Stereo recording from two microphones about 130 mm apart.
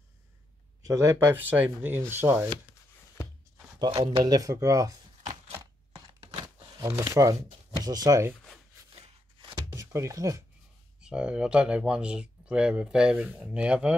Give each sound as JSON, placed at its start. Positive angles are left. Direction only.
{"t": 0.8, "sound": "speech", "side_deg": -25}
{"t": 4.0, "sound": "speech", "side_deg": -30}
{"t": 5.9, "sound": "chopping", "side_deg": -30}
{"t": 7.8, "sound": "speech", "side_deg": -30}
{"t": 9.8, "sound": "speech", "side_deg": -25}
{"t": 11.0, "sound": "speech", "side_deg": -5}